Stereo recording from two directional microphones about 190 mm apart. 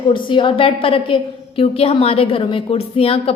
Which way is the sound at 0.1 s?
25° left (ahead or behind).